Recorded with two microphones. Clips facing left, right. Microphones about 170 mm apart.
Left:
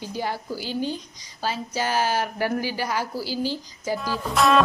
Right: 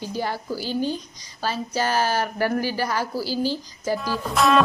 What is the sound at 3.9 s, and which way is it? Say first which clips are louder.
Speech: left 1 dB; centre (ahead or behind).